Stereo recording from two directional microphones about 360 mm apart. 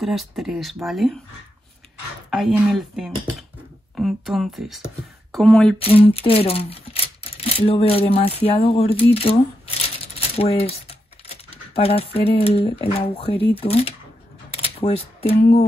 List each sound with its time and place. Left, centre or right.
0.0 s speech: centre
2.3 s speech: centre
5.8 s speech: centre
9.8 s coin: centre
13.6 s speech: centre